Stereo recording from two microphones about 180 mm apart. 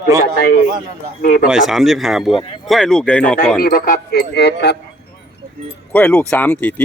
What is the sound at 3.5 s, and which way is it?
Speech, 55° left (ahead or behind).